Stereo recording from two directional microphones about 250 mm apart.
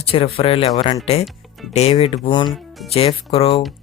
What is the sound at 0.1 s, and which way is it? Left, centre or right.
Speech, left.